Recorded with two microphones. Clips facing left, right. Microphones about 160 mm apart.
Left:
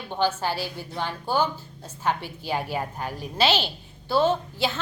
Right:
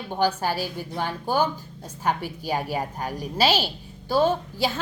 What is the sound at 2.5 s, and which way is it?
Speech, 40° right (ahead or behind).